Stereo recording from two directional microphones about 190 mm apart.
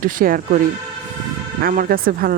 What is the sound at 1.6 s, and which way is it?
Speech, 50° right (ahead or behind).